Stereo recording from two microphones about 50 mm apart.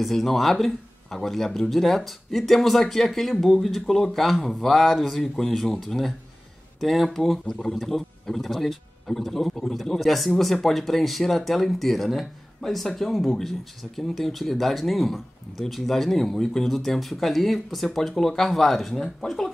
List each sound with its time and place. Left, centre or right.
0.0 s speech: centre